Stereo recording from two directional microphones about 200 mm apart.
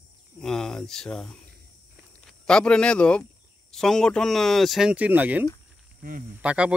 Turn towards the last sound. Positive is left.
turn(degrees=-5)  # may be behind; listen again after turning